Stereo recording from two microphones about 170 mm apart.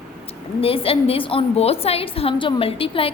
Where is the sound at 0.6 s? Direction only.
35° left (ahead or behind).